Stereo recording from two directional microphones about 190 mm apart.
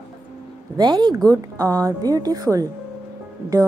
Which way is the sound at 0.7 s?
20° right (ahead or behind).